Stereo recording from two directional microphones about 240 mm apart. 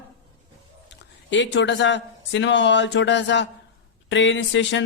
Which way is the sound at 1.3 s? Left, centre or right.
Left.